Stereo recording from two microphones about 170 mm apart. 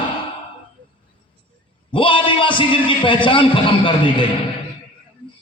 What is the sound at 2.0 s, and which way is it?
A man's voice, 30° left (ahead or behind).